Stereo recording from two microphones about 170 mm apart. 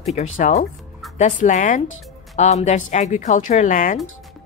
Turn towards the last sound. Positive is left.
turn(degrees=50)  # may be behind; listen again after turning